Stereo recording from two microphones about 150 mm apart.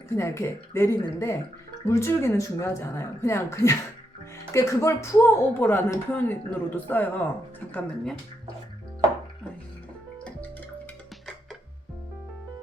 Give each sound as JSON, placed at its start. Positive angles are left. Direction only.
{"t": 0.1, "sound": "a woman's voice", "side_deg": 20}